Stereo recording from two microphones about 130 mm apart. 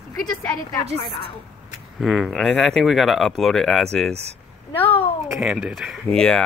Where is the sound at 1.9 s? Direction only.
Centre (ahead or behind).